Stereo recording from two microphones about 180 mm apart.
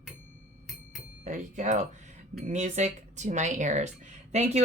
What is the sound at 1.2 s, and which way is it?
Speech, 40° right (ahead or behind).